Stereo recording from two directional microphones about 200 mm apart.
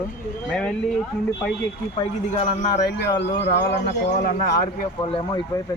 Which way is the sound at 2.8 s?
50° left (ahead or behind).